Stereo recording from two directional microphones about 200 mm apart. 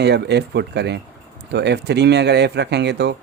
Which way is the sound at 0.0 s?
55° right (ahead or behind).